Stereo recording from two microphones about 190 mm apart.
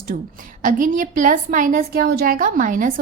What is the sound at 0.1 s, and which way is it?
Speech, 55° right (ahead or behind).